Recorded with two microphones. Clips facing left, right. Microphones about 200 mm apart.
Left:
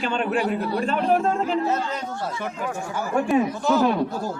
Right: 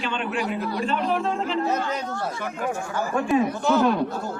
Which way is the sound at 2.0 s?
15° left (ahead or behind).